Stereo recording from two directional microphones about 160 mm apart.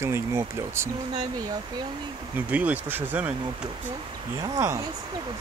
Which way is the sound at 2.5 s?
10° right (ahead or behind).